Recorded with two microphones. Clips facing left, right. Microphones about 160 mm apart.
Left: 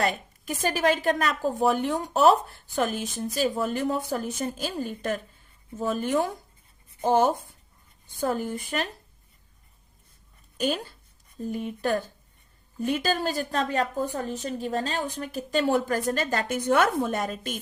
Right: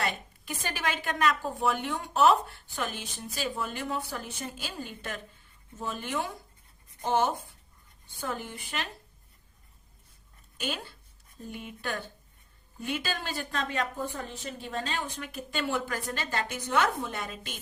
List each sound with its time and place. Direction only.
0.0 s a woman's voice: 40° left (ahead or behind)
10.6 s a woman's voice: 40° left (ahead or behind)